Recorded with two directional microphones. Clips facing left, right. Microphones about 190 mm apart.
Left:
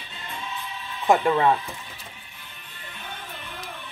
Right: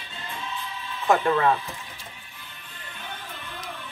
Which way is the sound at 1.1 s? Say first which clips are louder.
Left 2 dB; 15° left (ahead or behind).